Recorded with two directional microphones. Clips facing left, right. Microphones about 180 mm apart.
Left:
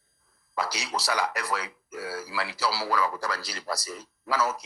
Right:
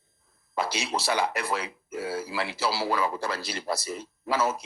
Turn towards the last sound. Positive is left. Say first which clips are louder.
# right 1 dB
turn(degrees=-25)  # may be behind; listen again after turning